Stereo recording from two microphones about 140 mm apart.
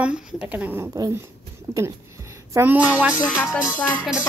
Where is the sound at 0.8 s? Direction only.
25° right (ahead or behind).